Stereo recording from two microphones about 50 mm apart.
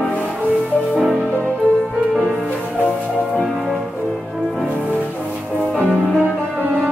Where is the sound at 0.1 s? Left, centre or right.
Left.